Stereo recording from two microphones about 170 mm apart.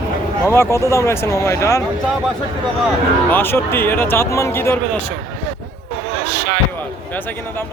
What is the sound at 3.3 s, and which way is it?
Speech, 10° left (ahead or behind).